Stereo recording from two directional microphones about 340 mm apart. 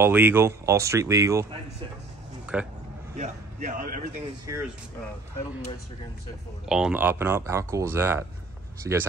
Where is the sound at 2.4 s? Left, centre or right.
Centre.